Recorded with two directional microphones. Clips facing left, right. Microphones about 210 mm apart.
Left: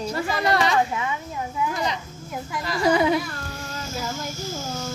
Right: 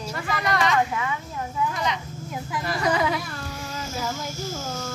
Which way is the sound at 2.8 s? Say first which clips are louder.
Left 5 dB; 30° left (ahead or behind).